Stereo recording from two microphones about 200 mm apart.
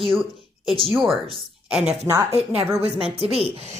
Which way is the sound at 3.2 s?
30° right (ahead or behind).